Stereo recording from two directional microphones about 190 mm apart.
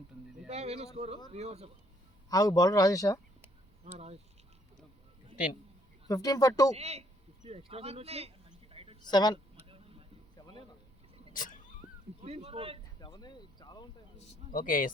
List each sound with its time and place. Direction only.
0.4 s speech: 35° right (ahead or behind)
2.3 s speech: 20° left (ahead or behind)
3.9 s speech: 35° right (ahead or behind)
6.1 s speech: 20° left (ahead or behind)
6.7 s speech: 35° right (ahead or behind)
8.7 s a sound: 30° right (ahead or behind)
9.0 s speech: 20° left (ahead or behind)
9.6 s vehicle: 30° right (ahead or behind)
11.3 s a sound: 45° left (ahead or behind)
12.2 s speech: 30° right (ahead or behind)
13.0 s a sound: 20° left (ahead or behind)
14.5 s speech: 45° left (ahead or behind)